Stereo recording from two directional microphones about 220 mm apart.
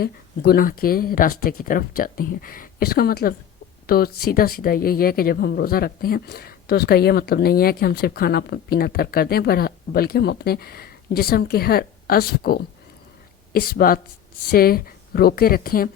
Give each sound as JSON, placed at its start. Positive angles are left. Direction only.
{"t": 0.0, "sound": "speech", "side_deg": 45}